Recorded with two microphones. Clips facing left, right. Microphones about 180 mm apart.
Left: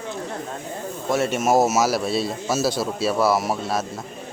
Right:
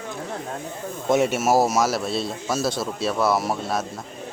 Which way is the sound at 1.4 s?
Centre (ahead or behind).